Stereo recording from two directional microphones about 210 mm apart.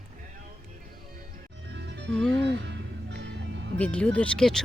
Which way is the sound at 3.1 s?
55° right (ahead or behind).